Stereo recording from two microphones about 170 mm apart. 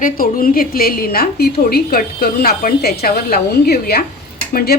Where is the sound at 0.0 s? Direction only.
55° left (ahead or behind).